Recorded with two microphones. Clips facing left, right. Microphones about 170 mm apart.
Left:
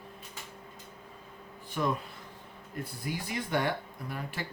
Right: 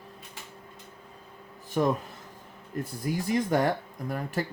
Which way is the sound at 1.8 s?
35° right (ahead or behind).